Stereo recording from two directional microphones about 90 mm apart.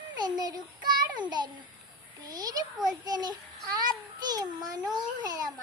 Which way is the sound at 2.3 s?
45° right (ahead or behind).